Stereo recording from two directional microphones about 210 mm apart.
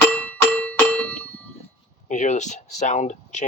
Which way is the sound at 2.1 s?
35° left (ahead or behind).